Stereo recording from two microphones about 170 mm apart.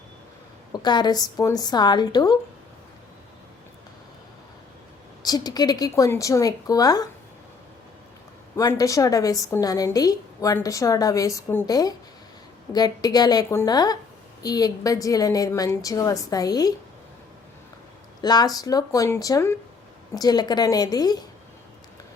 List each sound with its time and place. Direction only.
0.7 s a woman's voice: 25° left (ahead or behind)
5.2 s a woman's voice: 25° left (ahead or behind)
8.5 s a woman's voice: 20° left (ahead or behind)
18.2 s a woman's voice: 25° left (ahead or behind)